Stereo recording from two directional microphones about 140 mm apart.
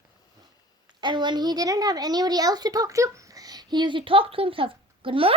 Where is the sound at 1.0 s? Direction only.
30° right (ahead or behind).